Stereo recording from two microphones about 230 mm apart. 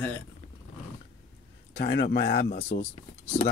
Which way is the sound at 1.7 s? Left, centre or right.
Left.